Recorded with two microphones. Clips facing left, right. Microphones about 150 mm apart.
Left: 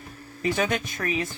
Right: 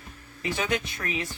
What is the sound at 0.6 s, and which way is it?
Speech, 45° left (ahead or behind).